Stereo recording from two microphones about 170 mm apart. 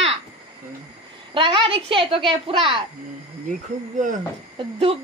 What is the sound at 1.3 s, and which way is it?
A woman's voice, 30° right (ahead or behind).